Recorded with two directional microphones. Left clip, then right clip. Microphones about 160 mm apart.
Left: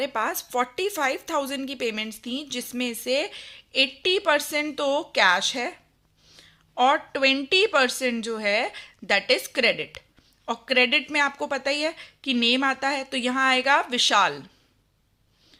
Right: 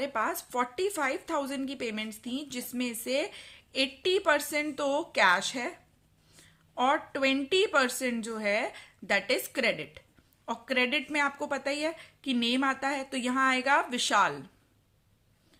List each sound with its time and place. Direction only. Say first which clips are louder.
0.0 s a woman's voice: left 4 dB; 25° left (ahead or behind)